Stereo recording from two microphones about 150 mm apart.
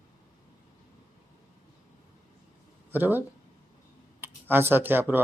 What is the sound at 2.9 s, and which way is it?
Speech, 15° right (ahead or behind).